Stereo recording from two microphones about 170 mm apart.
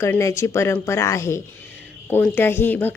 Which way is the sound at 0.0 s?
15° left (ahead or behind).